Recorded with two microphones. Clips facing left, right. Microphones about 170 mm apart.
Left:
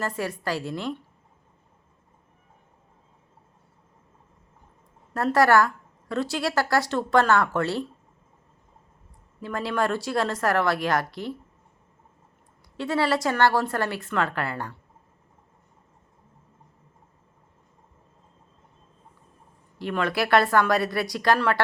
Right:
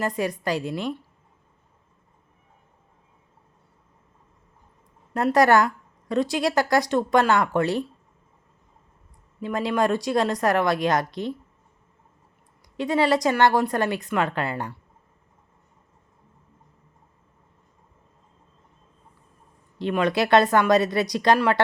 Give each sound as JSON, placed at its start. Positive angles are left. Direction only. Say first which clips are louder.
{"t": 0.0, "sound": "a woman's voice", "louder": "right 3 dB", "side_deg": -15}
{"t": 5.1, "sound": "a woman's voice", "louder": "right 1 dB", "side_deg": -15}
{"t": 9.4, "sound": "a woman's voice", "louder": "right 3 dB", "side_deg": -15}
{"t": 12.7, "sound": "a woman's voice", "louder": "right 3 dB", "side_deg": -15}
{"t": 19.8, "sound": "a woman's voice", "louder": "right 4 dB", "side_deg": -20}